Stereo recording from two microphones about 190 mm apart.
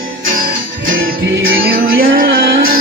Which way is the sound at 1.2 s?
55° right (ahead or behind).